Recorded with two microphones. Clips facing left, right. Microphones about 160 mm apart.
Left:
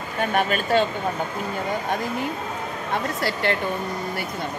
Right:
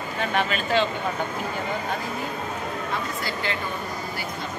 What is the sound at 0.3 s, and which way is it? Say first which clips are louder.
Speech: left 3 dB; 45° left (ahead or behind).